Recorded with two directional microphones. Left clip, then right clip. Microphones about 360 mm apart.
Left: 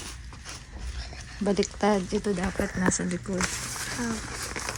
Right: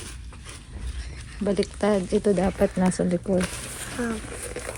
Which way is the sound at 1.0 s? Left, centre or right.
Centre.